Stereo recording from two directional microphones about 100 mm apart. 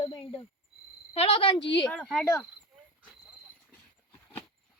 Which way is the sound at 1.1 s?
75° left (ahead or behind).